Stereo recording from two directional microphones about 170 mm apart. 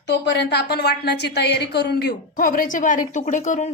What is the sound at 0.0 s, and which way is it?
A woman's voice, 90° left.